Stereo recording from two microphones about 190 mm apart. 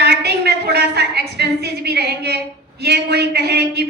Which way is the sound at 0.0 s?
55° right (ahead or behind).